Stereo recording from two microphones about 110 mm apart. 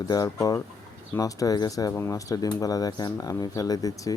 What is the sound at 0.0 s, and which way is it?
Speech, 35° left (ahead or behind).